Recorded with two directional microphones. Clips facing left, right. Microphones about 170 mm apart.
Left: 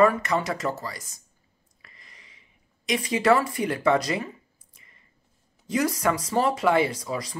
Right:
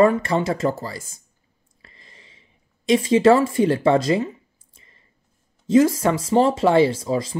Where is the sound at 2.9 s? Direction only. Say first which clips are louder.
Right 7 dB; 25° right (ahead or behind).